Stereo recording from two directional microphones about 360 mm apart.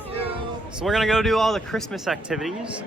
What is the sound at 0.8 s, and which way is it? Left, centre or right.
Speech, centre.